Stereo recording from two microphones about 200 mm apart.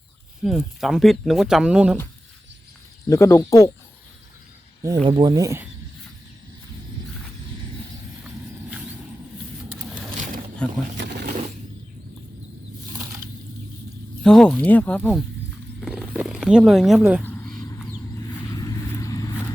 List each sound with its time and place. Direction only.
0.4 s speech: centre (ahead or behind)
3.1 s speech: 15° left (ahead or behind)
5.0 s speech: 20° right (ahead or behind)
10.6 s a sound: 5° left (ahead or behind)
10.9 s a sound: 60° right (ahead or behind)
14.3 s speech: 5° left (ahead or behind)
15.8 s wild animals: 5° right (ahead or behind)
17.2 s a sound: 5° left (ahead or behind)
18.6 s vehicle: 15° left (ahead or behind)